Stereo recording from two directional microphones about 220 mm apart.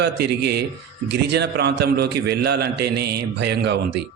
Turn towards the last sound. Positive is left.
turn(degrees=-50)  # may be behind; listen again after turning